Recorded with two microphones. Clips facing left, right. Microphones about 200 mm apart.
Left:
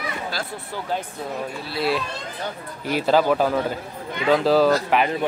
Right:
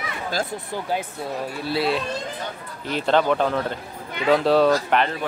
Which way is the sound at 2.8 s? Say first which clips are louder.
Left 1 dB; 5° left (ahead or behind).